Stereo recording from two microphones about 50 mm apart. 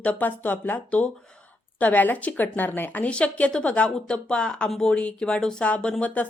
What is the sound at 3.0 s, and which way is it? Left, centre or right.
A woman's voice, left.